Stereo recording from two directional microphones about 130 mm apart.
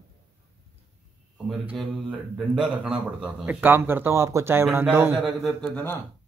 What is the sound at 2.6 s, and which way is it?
Speech, 10° right (ahead or behind).